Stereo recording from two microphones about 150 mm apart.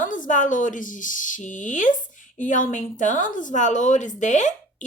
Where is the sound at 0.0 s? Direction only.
60° left (ahead or behind).